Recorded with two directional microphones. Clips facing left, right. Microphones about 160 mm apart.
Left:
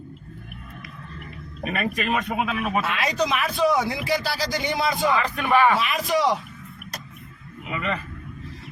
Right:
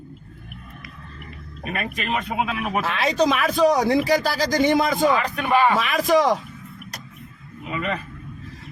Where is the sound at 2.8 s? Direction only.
30° right (ahead or behind).